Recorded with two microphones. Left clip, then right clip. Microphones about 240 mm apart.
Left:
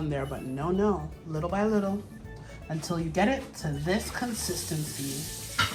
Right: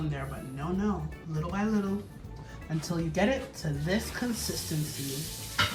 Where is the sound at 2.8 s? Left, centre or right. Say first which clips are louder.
Left 2 dB; centre.